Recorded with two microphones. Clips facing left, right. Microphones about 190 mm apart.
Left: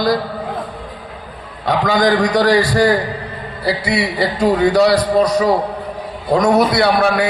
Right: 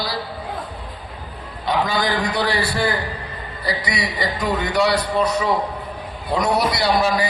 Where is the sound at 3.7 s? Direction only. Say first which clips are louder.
Left 7 dB; 25° left (ahead or behind).